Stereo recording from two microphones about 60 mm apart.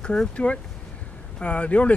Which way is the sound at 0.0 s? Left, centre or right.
Centre.